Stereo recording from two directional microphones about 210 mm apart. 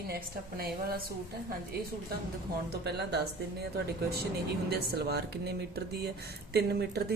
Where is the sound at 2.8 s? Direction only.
50° right (ahead or behind).